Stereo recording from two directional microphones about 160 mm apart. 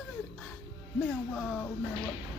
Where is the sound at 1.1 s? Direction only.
5° left (ahead or behind).